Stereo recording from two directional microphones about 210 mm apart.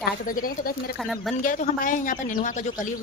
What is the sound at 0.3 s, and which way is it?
Speech, 40° left (ahead or behind).